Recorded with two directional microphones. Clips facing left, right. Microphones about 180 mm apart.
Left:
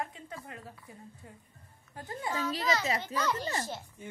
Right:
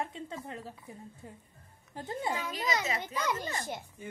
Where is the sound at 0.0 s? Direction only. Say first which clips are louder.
Right 2 dB; 25° right (ahead or behind).